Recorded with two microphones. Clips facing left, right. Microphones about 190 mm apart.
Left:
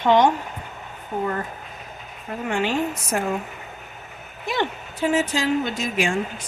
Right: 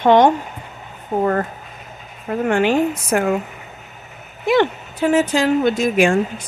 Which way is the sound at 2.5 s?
60° right (ahead or behind).